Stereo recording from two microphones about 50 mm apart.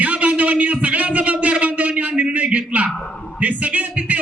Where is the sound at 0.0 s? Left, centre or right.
Right.